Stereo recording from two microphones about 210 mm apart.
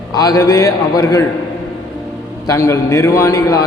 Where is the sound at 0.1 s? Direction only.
15° left (ahead or behind).